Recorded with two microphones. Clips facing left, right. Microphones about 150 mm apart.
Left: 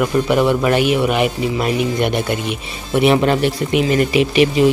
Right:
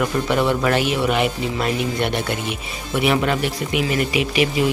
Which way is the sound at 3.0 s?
30° left (ahead or behind).